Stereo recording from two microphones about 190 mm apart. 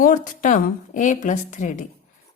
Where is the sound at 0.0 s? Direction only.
45° left (ahead or behind).